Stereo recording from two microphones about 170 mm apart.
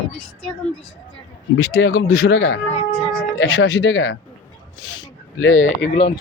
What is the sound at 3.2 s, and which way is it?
Speech, 90° left.